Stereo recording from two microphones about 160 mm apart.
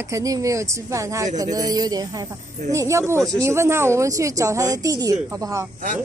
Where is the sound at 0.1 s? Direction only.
20° right (ahead or behind).